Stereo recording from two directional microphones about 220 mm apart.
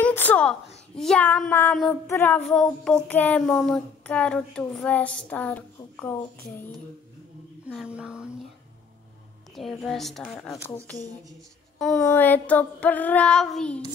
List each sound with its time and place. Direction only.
0.0 s a sound: 5° left (ahead or behind)
0.9 s speech: 5° left (ahead or behind)
7.6 s speech: 5° right (ahead or behind)
9.6 s speech: centre (ahead or behind)
12.0 s child singing: 10° left (ahead or behind)